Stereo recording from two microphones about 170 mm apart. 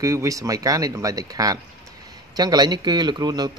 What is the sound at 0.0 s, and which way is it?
A man's voice, 20° right (ahead or behind).